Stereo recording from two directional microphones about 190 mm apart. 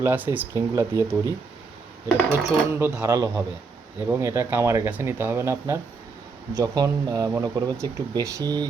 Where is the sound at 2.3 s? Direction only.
10° right (ahead or behind).